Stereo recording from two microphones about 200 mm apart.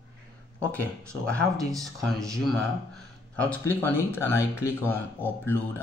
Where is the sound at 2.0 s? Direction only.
Centre (ahead or behind).